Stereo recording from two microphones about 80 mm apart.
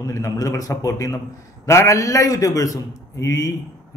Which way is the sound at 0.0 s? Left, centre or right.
Left.